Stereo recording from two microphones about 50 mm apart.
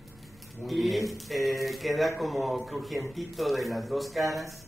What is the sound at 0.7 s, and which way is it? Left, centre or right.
Speech, centre.